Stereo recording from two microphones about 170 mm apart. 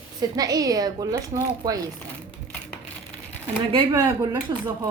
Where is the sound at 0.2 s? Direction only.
20° right (ahead or behind).